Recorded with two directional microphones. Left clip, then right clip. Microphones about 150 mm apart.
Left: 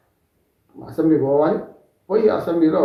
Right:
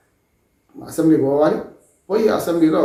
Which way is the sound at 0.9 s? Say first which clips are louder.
Right 1 dB; 15° right (ahead or behind).